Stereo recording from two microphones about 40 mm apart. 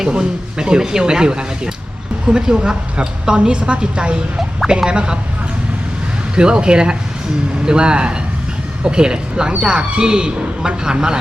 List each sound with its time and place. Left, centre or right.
0.1 s speech: right
6.3 s speech: right